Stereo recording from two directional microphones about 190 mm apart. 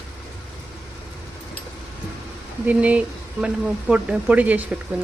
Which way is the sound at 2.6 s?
5° right (ahead or behind).